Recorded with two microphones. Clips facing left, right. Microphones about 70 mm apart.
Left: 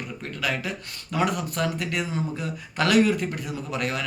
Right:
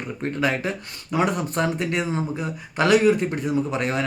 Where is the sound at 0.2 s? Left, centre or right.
Right.